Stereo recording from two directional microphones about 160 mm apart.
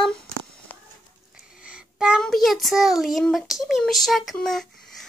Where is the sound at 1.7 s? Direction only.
5° right (ahead or behind).